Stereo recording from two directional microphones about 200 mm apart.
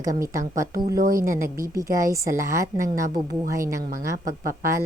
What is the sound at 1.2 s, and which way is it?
A woman's voice, 15° right (ahead or behind).